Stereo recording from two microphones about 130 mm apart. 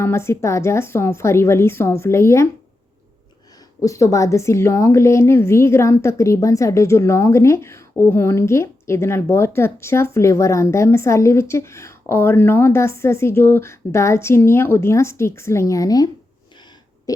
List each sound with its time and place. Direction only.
0.0 s a woman's voice: 20° left (ahead or behind)
3.8 s a woman's voice: 25° left (ahead or behind)
17.1 s owl: 30° left (ahead or behind)